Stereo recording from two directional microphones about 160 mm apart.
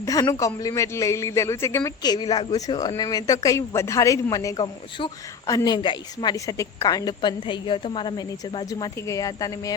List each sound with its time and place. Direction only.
0.0 s a man's voice: 20° left (ahead or behind)